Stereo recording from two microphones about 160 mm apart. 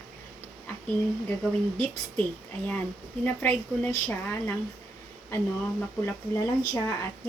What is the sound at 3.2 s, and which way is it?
A woman's voice, 10° left (ahead or behind).